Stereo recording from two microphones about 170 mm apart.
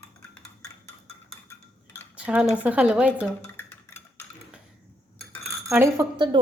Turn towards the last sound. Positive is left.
turn(degrees=-25)  # may be behind; listen again after turning